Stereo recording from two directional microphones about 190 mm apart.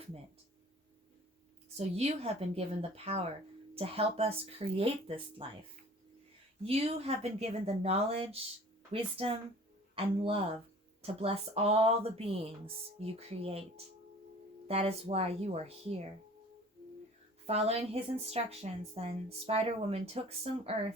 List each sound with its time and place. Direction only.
1.7 s speech: 35° right (ahead or behind)
6.6 s speech: 30° right (ahead or behind)
17.4 s speech: 30° right (ahead or behind)